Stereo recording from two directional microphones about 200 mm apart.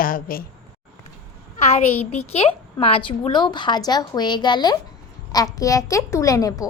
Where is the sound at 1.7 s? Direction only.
30° left (ahead or behind).